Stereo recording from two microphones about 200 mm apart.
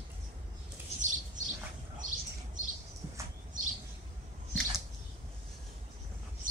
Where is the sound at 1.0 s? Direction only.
40° right (ahead or behind).